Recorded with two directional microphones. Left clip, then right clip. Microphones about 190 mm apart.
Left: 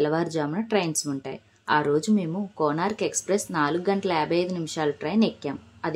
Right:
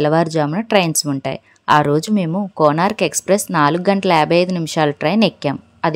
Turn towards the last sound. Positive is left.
turn(degrees=-45)  # may be behind; listen again after turning